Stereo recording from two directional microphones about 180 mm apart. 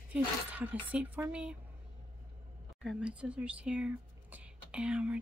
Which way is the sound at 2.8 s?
5° right (ahead or behind).